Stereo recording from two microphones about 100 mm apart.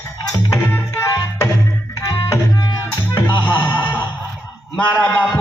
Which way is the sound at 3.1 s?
45° left (ahead or behind).